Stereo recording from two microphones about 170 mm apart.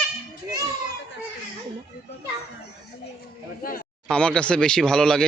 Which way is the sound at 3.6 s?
60° left (ahead or behind).